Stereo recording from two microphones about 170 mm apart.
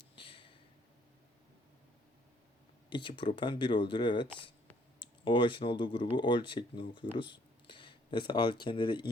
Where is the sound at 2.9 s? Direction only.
30° left (ahead or behind).